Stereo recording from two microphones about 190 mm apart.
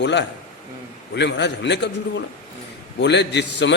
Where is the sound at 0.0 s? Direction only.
65° left (ahead or behind).